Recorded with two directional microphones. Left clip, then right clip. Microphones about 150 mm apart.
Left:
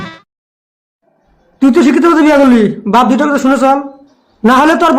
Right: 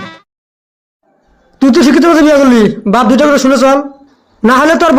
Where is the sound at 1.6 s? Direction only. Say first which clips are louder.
Right 1 dB; 20° right (ahead or behind).